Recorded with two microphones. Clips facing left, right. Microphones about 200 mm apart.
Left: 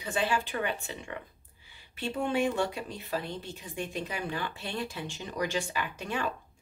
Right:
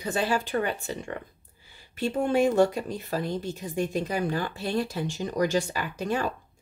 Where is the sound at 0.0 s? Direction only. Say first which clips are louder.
Right 3 dB; 40° right (ahead or behind).